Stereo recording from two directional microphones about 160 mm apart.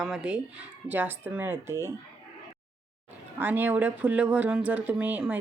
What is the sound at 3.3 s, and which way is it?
Speech, 10° right (ahead or behind).